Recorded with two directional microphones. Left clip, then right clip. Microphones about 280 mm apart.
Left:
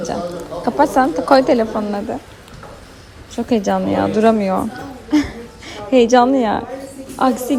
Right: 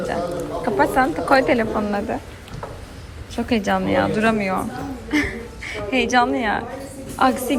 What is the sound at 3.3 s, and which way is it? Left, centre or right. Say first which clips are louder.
A woman's voice: left 3 dB; centre.